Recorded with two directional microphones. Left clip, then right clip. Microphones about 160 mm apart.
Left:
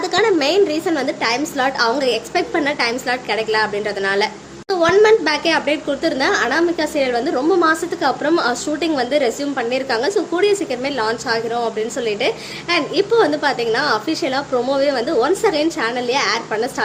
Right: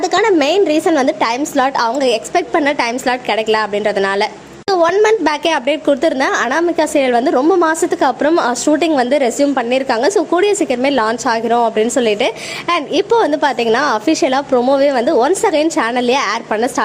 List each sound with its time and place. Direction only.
0.1 s a woman's voice: 35° right (ahead or behind)